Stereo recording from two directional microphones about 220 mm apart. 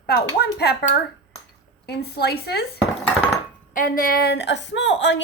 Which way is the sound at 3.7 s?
40° left (ahead or behind).